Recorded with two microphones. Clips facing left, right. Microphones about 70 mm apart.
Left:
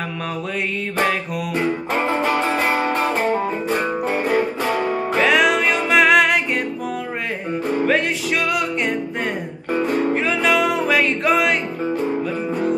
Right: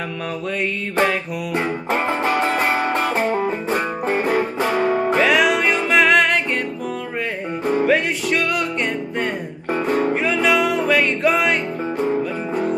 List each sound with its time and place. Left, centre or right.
5.1 s music: centre
7.8 s music: centre